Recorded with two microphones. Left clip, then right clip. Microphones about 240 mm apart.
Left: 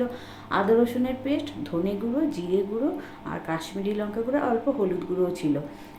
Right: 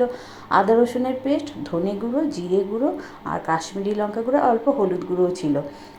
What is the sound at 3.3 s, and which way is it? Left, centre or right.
Speech, centre.